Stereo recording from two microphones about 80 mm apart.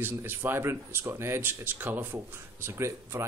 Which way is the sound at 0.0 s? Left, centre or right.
Right.